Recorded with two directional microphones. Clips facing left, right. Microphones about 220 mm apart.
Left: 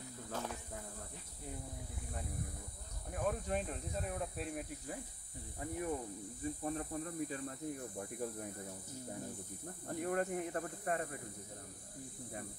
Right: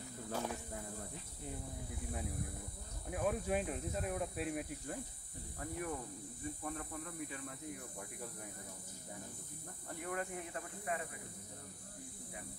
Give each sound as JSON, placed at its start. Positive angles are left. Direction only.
{"t": 0.3, "sound": "speech", "side_deg": -10}
{"t": 3.1, "sound": "speech", "side_deg": -5}
{"t": 5.6, "sound": "speech", "side_deg": 20}
{"t": 6.6, "sound": "speech", "side_deg": 30}
{"t": 9.8, "sound": "speech", "side_deg": 45}